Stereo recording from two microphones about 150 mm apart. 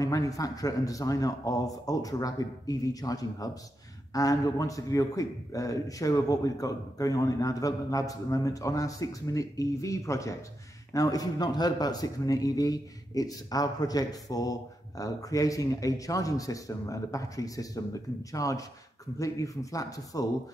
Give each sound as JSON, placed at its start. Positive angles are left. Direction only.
{"t": 0.0, "sound": "a man's voice", "side_deg": 25}